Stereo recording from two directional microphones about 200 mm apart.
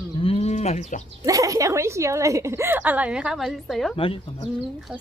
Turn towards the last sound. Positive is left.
turn(degrees=-5)  # may be behind; listen again after turning